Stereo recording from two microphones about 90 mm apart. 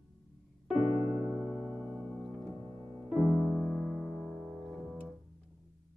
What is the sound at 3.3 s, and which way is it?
Music, centre (ahead or behind).